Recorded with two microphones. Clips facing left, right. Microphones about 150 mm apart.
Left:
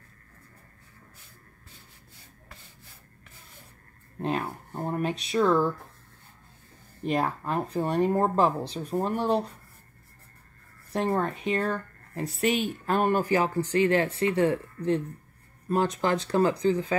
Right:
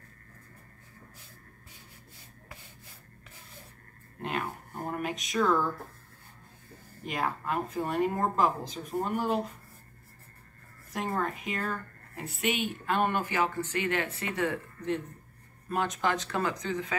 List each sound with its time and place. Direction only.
4.2 s a woman's voice: 35° left (ahead or behind)
7.0 s a woman's voice: 35° left (ahead or behind)
10.9 s a woman's voice: 30° left (ahead or behind)